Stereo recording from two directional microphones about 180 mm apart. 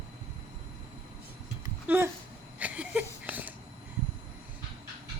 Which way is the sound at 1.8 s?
10° right (ahead or behind).